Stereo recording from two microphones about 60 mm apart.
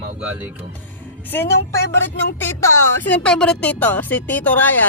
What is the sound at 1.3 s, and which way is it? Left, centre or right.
Speech, left.